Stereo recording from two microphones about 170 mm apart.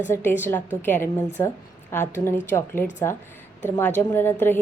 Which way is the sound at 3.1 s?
15° left (ahead or behind).